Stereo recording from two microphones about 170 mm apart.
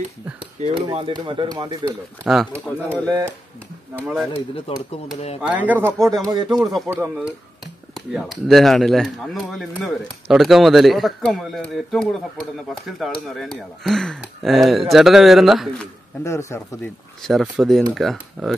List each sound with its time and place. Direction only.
0.4 s speech: 35° right (ahead or behind)
2.3 s speech: centre (ahead or behind)
3.1 s speech: 15° right (ahead or behind)
3.9 s speech: 5° right (ahead or behind)
4.7 s speech: 35° left (ahead or behind)
5.4 s speech: 10° right (ahead or behind)
6.0 s speech: 20° right (ahead or behind)
6.9 s speech: 15° right (ahead or behind)
7.6 s speech: centre (ahead or behind)
16.3 s speech: 15° left (ahead or behind)
17.2 s speech: centre (ahead or behind)